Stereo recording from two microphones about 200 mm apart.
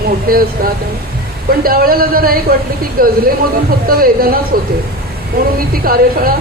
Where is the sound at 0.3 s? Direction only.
45° right (ahead or behind).